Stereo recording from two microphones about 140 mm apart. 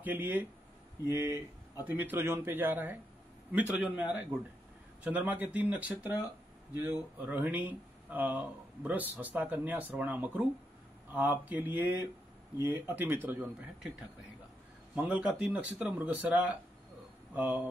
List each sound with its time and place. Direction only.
0.0 s speech: 15° right (ahead or behind)
1.0 s speech: 25° left (ahead or behind)
1.9 s speech: 15° right (ahead or behind)
15.0 s speech: 10° right (ahead or behind)